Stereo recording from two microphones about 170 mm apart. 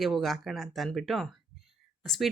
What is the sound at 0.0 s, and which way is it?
Speech, centre (ahead or behind).